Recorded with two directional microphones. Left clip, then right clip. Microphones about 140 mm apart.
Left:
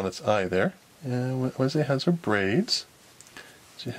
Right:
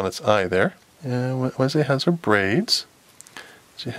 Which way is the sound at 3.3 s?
35° right (ahead or behind).